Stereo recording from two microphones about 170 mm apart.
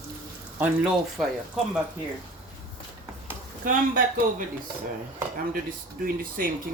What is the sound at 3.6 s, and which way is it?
Speech, 55° right (ahead or behind).